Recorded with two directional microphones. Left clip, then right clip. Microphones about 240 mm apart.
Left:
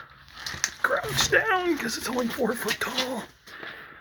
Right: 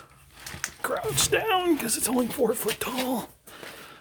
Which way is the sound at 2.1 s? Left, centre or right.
Centre.